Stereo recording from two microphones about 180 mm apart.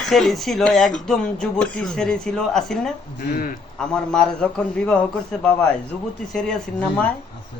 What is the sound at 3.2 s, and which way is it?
Speech, 50° left (ahead or behind).